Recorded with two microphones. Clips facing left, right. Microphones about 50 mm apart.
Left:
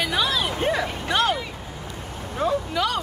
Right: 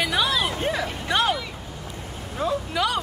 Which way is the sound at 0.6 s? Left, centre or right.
Centre.